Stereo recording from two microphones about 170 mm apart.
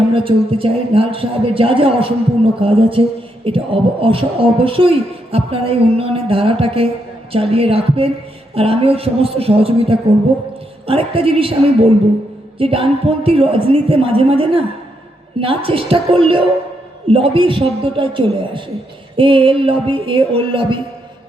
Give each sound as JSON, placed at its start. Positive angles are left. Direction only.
{"t": 0.1, "sound": "speech", "side_deg": -30}